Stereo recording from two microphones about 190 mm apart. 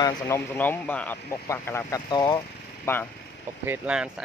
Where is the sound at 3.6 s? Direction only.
5° right (ahead or behind).